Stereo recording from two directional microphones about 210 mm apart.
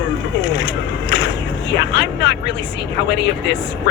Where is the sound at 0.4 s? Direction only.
60° left (ahead or behind).